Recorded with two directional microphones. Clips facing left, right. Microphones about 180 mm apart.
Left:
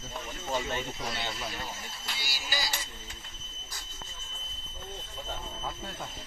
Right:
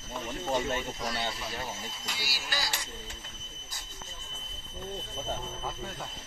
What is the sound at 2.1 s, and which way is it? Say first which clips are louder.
Speech: left 1 dB; centre (ahead or behind).